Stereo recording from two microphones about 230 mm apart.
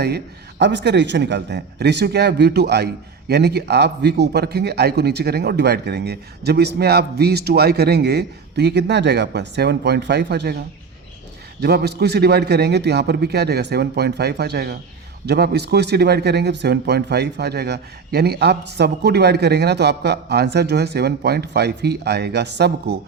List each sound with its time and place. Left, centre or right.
0.6 s speech: right
11.6 s speech: right